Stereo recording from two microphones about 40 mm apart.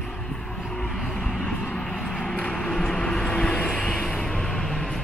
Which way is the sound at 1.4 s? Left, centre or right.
Left.